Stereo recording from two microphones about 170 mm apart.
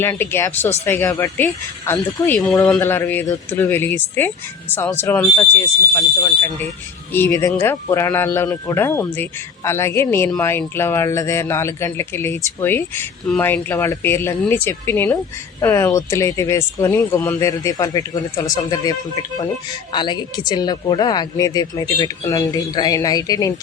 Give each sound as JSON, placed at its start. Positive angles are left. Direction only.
{"t": 0.0, "sound": "speech", "side_deg": 15}
{"t": 19.9, "sound": "speech", "side_deg": 25}